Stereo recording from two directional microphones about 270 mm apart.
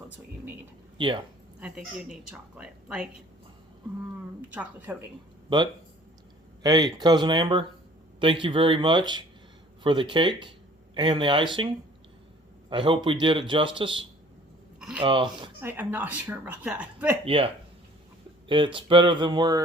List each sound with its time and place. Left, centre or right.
0.9 s speech: centre
1.5 s speech: centre
4.4 s speech: centre
6.6 s a woman's voice: centre
12.7 s a man's voice: centre
14.8 s a sound: centre
15.0 s a woman's voice: centre
15.6 s a woman's voice: centre
17.2 s a man's voice: centre